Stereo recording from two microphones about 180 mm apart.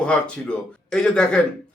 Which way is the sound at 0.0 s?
5° left (ahead or behind).